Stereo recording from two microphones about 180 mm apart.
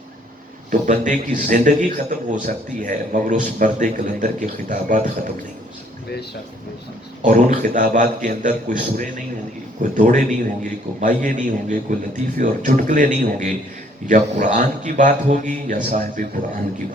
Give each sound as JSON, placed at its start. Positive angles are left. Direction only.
{"t": 0.7, "sound": "a man's voice", "side_deg": -45}
{"t": 7.3, "sound": "a man's voice", "side_deg": -45}